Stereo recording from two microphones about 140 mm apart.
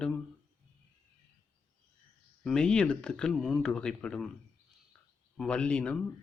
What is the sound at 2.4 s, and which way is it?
Speech, 5° left (ahead or behind).